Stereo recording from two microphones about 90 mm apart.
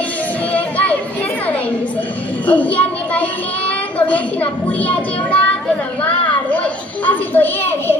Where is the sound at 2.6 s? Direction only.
15° left (ahead or behind).